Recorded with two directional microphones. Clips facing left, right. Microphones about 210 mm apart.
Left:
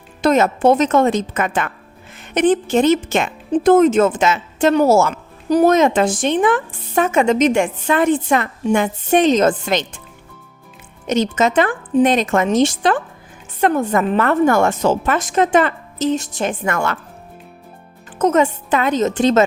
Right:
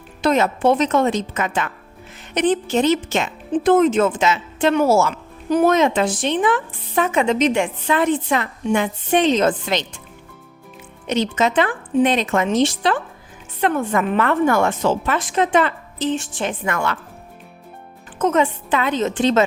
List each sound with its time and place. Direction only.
0.2 s speech: 45° left (ahead or behind)
11.0 s speech: 45° left (ahead or behind)
18.2 s speech: 40° left (ahead or behind)